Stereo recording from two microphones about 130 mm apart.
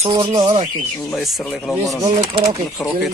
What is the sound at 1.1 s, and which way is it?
Speech, centre (ahead or behind).